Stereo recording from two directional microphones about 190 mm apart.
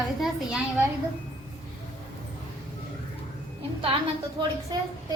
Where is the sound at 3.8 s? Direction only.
30° right (ahead or behind).